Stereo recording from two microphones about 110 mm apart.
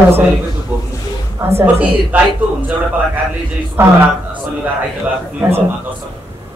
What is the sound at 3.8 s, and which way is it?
Speech, 20° right (ahead or behind).